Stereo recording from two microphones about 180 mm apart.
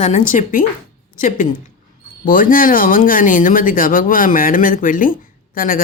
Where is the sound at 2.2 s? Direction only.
50° left (ahead or behind).